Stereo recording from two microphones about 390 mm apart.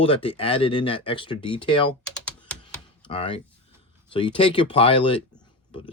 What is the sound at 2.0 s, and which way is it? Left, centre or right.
Typing, centre.